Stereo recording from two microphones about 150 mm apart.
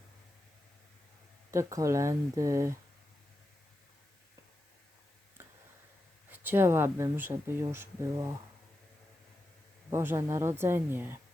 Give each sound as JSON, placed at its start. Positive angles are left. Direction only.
{"t": 1.5, "sound": "speech", "side_deg": -20}
{"t": 5.4, "sound": "tick", "side_deg": -15}
{"t": 6.3, "sound": "speech", "side_deg": -15}
{"t": 9.9, "sound": "speech", "side_deg": -15}